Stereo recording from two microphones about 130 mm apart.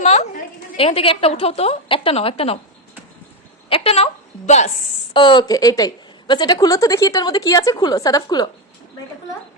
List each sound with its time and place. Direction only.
0.0 s a woman's voice: 60° left (ahead or behind)
3.7 s a woman's voice: 45° left (ahead or behind)
5.1 s a woman's voice: 35° left (ahead or behind)